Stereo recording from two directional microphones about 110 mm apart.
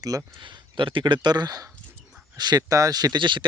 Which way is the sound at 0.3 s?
50° right (ahead or behind).